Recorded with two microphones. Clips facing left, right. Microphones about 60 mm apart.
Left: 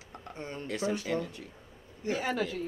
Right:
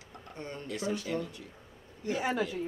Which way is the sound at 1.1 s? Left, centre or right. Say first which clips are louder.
Left 2 dB; left.